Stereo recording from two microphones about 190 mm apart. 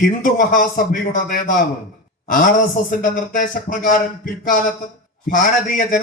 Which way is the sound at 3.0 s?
45° left (ahead or behind).